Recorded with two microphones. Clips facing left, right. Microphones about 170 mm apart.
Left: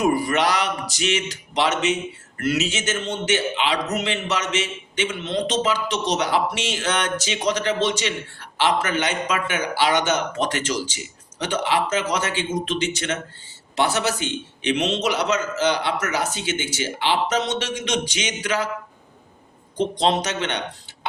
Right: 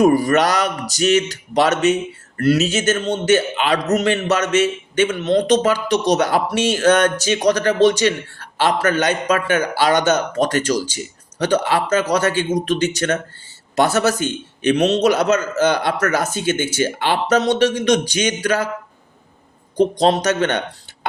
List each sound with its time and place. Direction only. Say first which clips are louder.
0.0 s a man's voice: right 6 dB; 40° right (ahead or behind)
19.7 s a man's voice: right 5 dB; 40° right (ahead or behind)